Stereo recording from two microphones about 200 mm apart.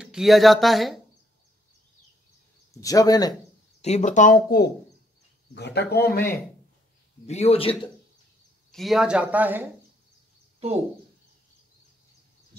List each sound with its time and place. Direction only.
0.0 s speech: centre (ahead or behind)
2.7 s a man's voice: 15° left (ahead or behind)
3.8 s speech: 35° left (ahead or behind); by 6.2 s 50° left (ahead or behind)
7.2 s speech: 30° left (ahead or behind)
8.7 s speech: centre (ahead or behind)